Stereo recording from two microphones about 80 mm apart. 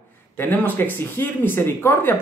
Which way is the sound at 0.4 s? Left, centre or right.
Left.